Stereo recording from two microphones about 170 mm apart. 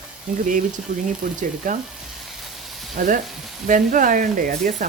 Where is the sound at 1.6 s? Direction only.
55° right (ahead or behind).